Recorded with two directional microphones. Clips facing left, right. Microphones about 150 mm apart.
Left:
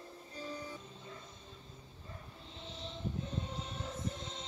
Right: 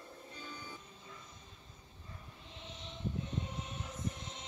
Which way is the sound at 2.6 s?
30° left (ahead or behind).